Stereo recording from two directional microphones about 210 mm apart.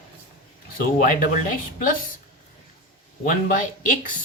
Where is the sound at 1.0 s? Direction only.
40° left (ahead or behind).